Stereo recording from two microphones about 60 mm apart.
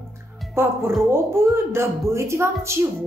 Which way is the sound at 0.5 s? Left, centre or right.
Right.